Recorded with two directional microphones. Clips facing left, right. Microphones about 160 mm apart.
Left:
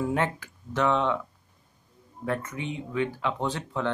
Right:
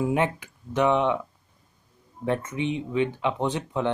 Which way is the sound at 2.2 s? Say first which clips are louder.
Right 5 dB; 20° right (ahead or behind).